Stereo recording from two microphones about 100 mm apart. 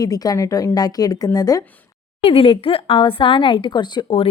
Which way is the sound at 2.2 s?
65° left (ahead or behind).